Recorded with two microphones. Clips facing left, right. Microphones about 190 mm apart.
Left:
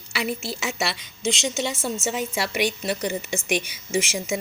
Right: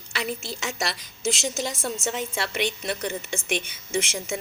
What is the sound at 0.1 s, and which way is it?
A woman's voice, 5° left (ahead or behind).